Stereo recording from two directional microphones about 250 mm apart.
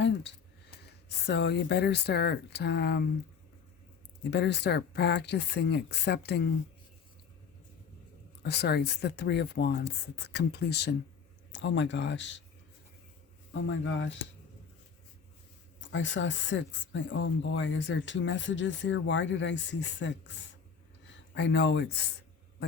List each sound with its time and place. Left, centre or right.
0.0 s speech: left
4.2 s speech: left
8.4 s speech: left
13.5 s speech: left
15.9 s speech: left
21.3 s speech: left